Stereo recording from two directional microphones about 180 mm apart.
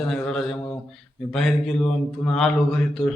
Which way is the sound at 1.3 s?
Centre (ahead or behind).